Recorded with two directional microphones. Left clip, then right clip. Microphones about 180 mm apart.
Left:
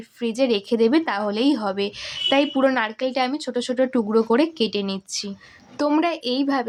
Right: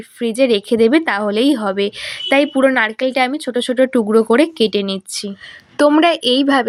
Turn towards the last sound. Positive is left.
turn(degrees=-25)  # may be behind; listen again after turning